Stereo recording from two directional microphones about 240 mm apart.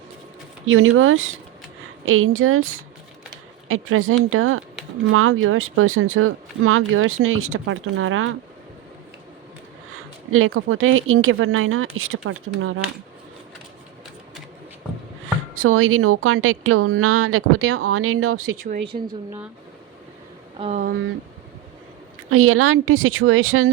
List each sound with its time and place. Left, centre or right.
0.6 s speech: right
3.7 s speech: right
10.3 s speech: right
15.5 s speech: right
18.6 s speech: right
18.9 s a woman's voice: centre
20.6 s a woman's voice: right
22.3 s speech: right